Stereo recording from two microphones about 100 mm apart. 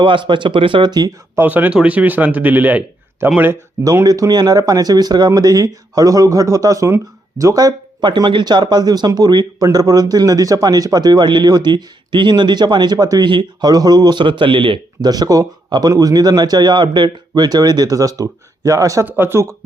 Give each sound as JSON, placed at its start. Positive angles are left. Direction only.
{"t": 0.0, "sound": "speech", "side_deg": -55}
{"t": 1.4, "sound": "speech", "side_deg": -15}
{"t": 4.0, "sound": "a man's voice", "side_deg": -40}
{"t": 8.0, "sound": "speech", "side_deg": -50}
{"t": 15.1, "sound": "a man's voice", "side_deg": -40}
{"t": 19.0, "sound": "speech", "side_deg": -20}